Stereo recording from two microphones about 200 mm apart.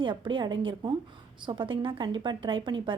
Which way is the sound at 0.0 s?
25° right (ahead or behind).